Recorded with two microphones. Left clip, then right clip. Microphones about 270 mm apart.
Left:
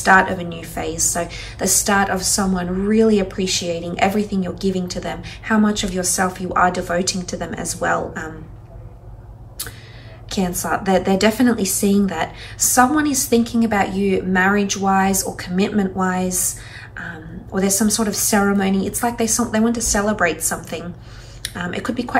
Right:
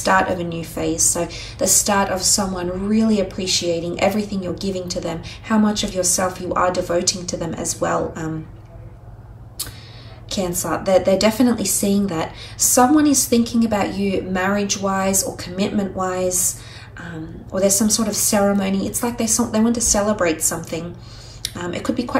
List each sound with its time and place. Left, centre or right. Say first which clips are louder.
0.0 s a woman's voice: left 3 dB; centre
10.3 s a woman's voice: left 1 dB; centre
17.6 s a woman's voice: right 2 dB; centre